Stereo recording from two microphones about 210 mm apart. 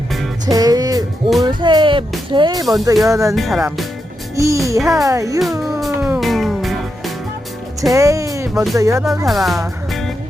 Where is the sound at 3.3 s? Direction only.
Centre (ahead or behind).